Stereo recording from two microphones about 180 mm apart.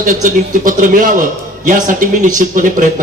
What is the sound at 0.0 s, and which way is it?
A man's voice, 45° right (ahead or behind).